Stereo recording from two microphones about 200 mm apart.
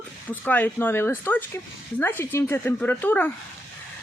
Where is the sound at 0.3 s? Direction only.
10° left (ahead or behind).